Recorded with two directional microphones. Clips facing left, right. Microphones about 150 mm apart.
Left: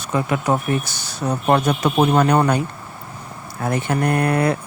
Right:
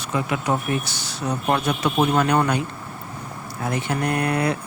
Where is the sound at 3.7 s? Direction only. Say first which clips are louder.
Left 4 dB; 50° left (ahead or behind).